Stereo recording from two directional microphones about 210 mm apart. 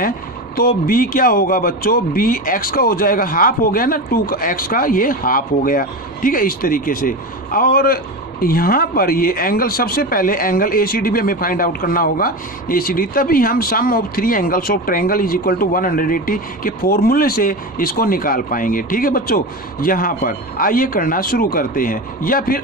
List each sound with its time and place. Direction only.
0.6 s a man's voice: 45° left (ahead or behind)